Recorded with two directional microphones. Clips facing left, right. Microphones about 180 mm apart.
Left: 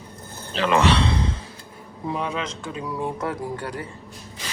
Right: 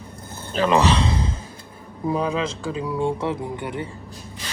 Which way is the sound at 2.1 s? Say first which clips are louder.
Right 4 dB; 30° right (ahead or behind).